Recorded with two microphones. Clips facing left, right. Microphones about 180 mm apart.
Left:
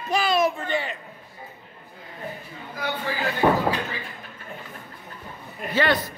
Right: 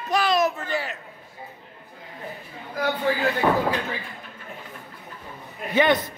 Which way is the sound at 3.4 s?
20° left (ahead or behind).